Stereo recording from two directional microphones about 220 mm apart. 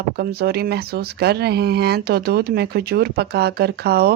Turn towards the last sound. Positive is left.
turn(degrees=-45)  # may be behind; listen again after turning